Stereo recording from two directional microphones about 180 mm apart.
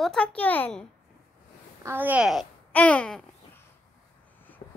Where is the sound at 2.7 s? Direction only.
10° left (ahead or behind).